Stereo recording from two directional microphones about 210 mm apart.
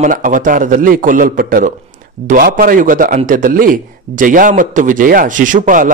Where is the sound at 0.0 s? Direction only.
40° right (ahead or behind).